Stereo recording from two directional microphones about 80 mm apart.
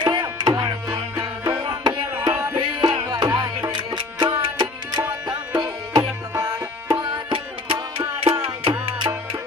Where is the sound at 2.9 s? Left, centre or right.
Right.